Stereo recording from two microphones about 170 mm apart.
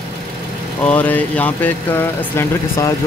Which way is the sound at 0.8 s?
10° left (ahead or behind).